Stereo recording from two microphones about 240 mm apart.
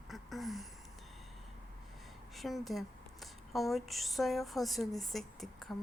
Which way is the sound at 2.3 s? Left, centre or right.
Centre.